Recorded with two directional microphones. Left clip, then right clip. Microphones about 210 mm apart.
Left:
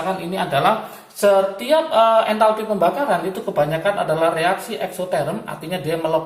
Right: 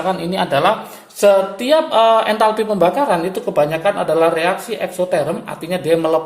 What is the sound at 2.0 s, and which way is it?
Speech, 50° right (ahead or behind).